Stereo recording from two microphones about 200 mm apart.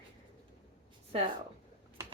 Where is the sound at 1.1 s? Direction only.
30° right (ahead or behind).